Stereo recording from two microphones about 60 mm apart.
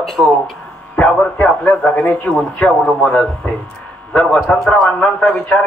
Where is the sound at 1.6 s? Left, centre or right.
Left.